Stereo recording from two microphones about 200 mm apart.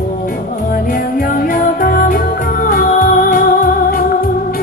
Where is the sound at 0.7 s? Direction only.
45° left (ahead or behind).